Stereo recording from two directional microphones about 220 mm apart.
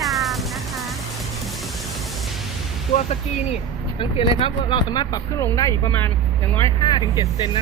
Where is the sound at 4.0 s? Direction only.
25° left (ahead or behind).